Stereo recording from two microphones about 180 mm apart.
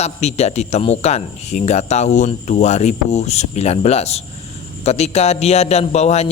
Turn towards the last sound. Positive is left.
turn(degrees=35)  # may be behind; listen again after turning